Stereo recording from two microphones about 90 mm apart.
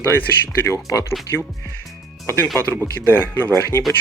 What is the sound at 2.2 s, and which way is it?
Speech, 25° left (ahead or behind).